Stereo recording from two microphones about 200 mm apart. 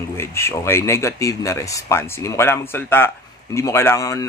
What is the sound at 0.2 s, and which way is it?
Speech, 15° left (ahead or behind).